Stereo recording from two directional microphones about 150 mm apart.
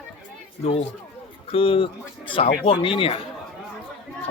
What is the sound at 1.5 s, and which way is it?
A man's voice, 35° left (ahead or behind).